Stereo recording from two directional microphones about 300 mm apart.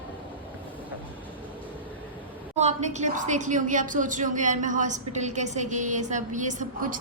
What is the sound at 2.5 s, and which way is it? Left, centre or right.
A woman's voice, right.